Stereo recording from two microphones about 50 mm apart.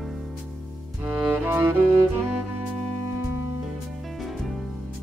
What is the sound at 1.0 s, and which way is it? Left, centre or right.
Music, right.